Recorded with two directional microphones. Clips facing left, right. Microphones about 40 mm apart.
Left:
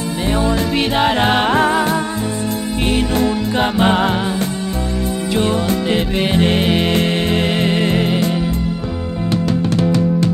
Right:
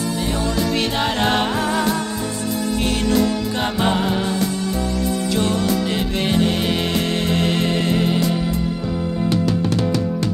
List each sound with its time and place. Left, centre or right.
0.2 s music: left
1.5 s music: left
2.8 s music: left
5.3 s music: left
9.8 s music: left